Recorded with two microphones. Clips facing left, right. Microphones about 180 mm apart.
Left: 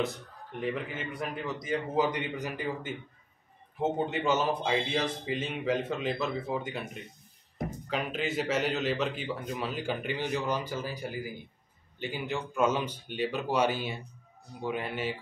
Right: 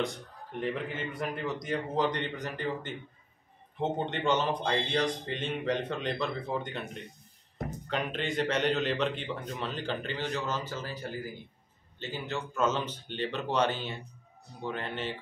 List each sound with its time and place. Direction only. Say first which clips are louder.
0.0 s a man's voice: left 1 dB; centre (ahead or behind)